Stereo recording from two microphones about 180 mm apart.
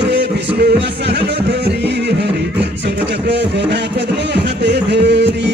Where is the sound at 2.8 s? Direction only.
75° right (ahead or behind).